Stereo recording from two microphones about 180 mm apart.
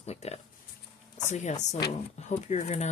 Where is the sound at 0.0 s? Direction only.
35° left (ahead or behind).